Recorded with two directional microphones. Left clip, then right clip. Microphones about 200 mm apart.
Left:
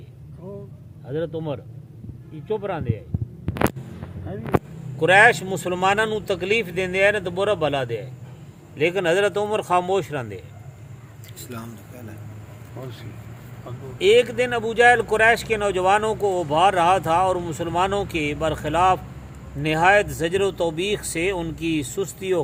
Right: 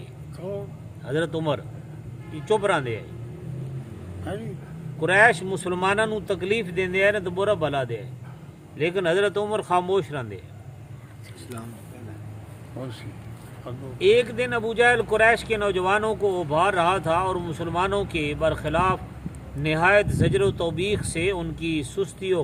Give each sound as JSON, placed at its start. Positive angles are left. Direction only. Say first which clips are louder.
{"t": 1.0, "sound": "speech", "louder": "right 2 dB", "side_deg": 35}
{"t": 4.9, "sound": "speech", "louder": "left 3 dB", "side_deg": 40}
{"t": 14.0, "sound": "speech", "louder": "left 3 dB", "side_deg": 45}